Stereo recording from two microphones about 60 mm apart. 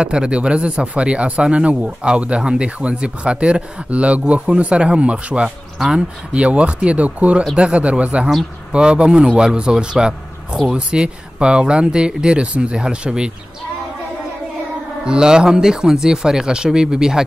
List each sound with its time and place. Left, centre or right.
0.0 s speech: centre
15.0 s speech: centre